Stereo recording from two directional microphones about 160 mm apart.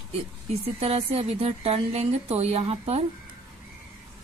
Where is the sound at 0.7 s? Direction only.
40° right (ahead or behind).